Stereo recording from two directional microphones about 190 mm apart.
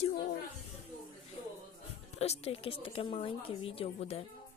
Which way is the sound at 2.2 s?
35° left (ahead or behind).